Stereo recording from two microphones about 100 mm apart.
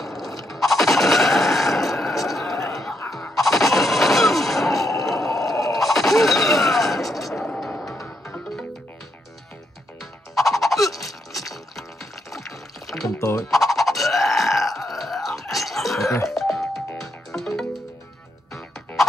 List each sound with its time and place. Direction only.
0.0 s a sound: centre (ahead or behind)
3.1 s music: centre (ahead or behind)
5.8 s mechanisms: centre (ahead or behind)
10.3 s music: centre (ahead or behind)
11.1 s a sound: centre (ahead or behind)
12.3 s pour: centre (ahead or behind)
13.2 s fowl: 30° left (ahead or behind)
13.5 s a sound: centre (ahead or behind)
16.3 s music: centre (ahead or behind)